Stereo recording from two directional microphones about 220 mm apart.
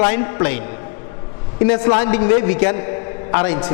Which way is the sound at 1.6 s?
20° left (ahead or behind).